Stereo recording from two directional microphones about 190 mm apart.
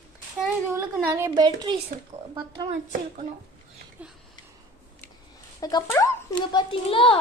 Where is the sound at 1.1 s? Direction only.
15° right (ahead or behind).